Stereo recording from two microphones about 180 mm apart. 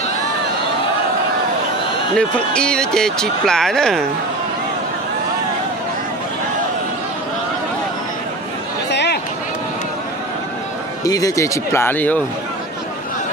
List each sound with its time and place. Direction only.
2.1 s speech: 5° left (ahead or behind)
8.9 s a sound: 70° left (ahead or behind)
11.0 s speech: 20° left (ahead or behind)